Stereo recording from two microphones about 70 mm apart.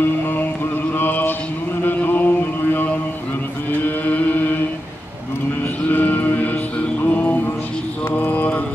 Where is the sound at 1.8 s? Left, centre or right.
Left.